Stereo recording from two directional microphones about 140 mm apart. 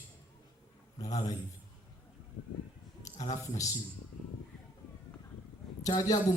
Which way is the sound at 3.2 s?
25° left (ahead or behind).